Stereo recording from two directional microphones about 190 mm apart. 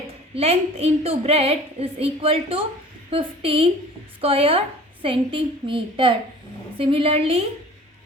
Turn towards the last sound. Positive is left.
turn(degrees=-30)  # may be behind; listen again after turning